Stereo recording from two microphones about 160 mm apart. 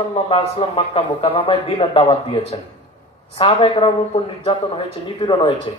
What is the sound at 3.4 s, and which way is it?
A man's voice, 40° left (ahead or behind).